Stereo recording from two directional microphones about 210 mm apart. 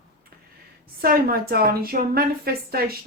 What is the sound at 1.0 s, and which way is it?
A woman's voice, 45° right (ahead or behind).